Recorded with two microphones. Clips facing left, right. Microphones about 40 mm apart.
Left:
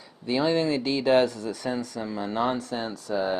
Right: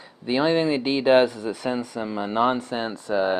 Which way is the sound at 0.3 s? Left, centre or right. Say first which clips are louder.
Right 3 dB; right.